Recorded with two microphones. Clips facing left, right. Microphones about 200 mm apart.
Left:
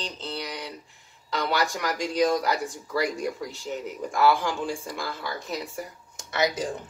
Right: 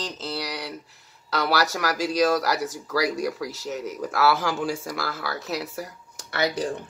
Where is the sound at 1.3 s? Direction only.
75° right (ahead or behind).